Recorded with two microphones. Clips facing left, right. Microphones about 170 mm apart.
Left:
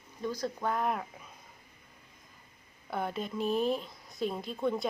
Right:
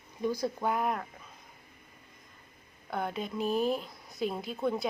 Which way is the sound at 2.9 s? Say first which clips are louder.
Even; centre (ahead or behind).